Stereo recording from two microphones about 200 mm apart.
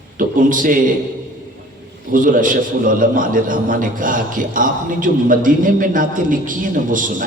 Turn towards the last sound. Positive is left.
turn(degrees=-40)  # may be behind; listen again after turning